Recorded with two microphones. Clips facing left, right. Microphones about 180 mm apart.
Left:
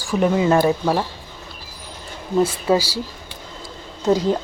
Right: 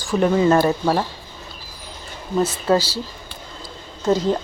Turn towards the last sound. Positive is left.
turn(degrees=15)  # may be behind; listen again after turning